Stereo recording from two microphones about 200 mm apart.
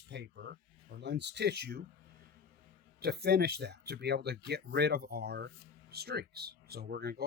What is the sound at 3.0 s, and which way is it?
Speech, 55° right (ahead or behind).